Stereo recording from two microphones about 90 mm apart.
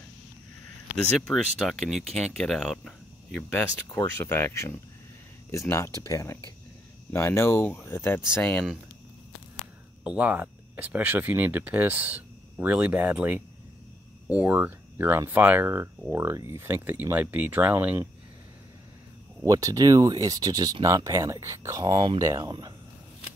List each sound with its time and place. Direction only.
1.2 s speech: 5° left (ahead or behind)
10.0 s speech: 15° right (ahead or behind)
19.4 s speech: 40° right (ahead or behind)
20.8 s speech: 35° right (ahead or behind)
21.8 s speech: 85° right
22.4 s speech: 55° right (ahead or behind)